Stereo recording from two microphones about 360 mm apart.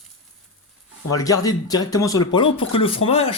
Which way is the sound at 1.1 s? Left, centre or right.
Centre.